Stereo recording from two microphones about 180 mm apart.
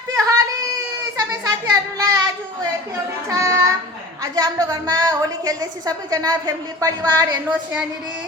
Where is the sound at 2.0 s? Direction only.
20° right (ahead or behind).